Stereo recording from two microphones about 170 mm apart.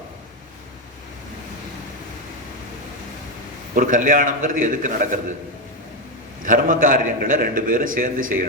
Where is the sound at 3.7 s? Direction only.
55° right (ahead or behind).